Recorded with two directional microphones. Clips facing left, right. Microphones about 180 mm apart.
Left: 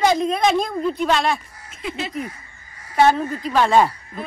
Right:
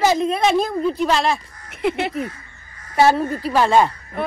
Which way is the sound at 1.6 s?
65° right (ahead or behind).